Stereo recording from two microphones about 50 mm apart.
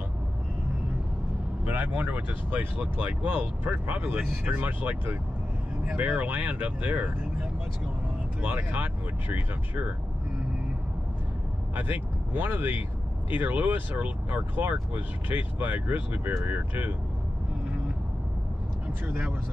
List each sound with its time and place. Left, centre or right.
2.0 s speech: right
5.9 s speech: right
8.4 s speech: right
11.7 s speech: right